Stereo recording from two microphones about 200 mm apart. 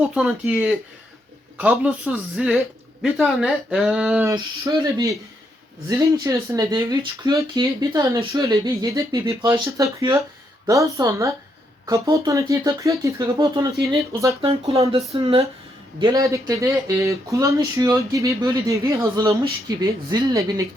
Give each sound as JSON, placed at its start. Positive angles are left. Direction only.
{"t": 0.0, "sound": "speech", "side_deg": -5}